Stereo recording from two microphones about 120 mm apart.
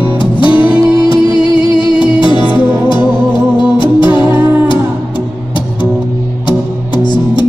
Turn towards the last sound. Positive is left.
turn(degrees=40)  # may be behind; listen again after turning